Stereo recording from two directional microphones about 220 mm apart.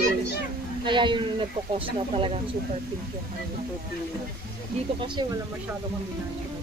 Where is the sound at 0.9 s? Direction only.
20° right (ahead or behind).